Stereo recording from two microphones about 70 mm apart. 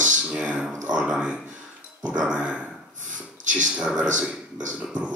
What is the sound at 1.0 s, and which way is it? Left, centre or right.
Speech, centre.